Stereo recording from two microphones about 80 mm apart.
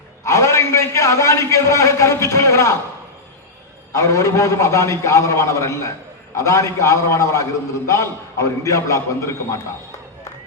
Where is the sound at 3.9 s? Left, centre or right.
Left.